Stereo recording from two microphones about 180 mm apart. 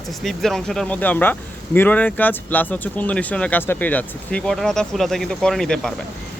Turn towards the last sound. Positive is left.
turn(degrees=5)  # may be behind; listen again after turning